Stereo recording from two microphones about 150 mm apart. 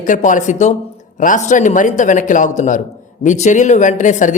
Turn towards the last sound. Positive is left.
turn(degrees=55)  # may be behind; listen again after turning